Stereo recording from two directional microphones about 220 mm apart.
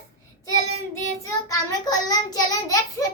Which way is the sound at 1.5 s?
15° left (ahead or behind).